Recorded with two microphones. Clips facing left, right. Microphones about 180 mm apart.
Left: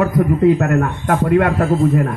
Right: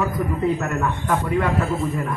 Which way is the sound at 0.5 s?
60° left (ahead or behind).